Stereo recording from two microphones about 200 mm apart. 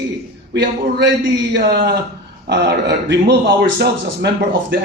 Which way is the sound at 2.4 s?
55° right (ahead or behind).